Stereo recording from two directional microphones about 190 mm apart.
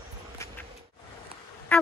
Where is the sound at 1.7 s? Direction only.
5° left (ahead or behind).